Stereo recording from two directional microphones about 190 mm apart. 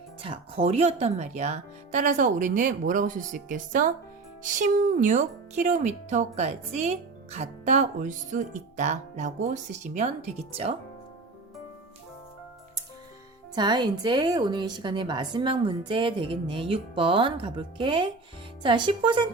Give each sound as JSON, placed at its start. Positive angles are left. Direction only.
{"t": 0.2, "sound": "speech", "side_deg": -30}
{"t": 13.6, "sound": "a woman's voice", "side_deg": -25}